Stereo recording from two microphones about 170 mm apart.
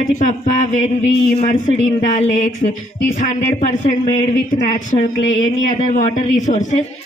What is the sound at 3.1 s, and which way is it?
Speech, 45° left (ahead or behind).